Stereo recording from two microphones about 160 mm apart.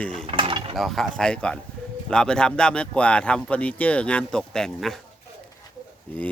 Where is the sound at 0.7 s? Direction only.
Centre (ahead or behind).